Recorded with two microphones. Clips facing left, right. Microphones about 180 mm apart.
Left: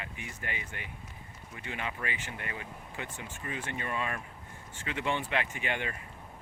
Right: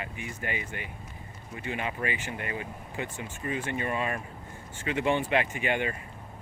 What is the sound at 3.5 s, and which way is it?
Speech, 10° right (ahead or behind).